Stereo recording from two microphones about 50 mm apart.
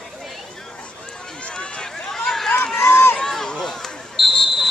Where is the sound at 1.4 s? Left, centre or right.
Centre.